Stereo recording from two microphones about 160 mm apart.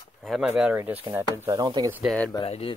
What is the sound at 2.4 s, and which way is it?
Speech, 40° left (ahead or behind).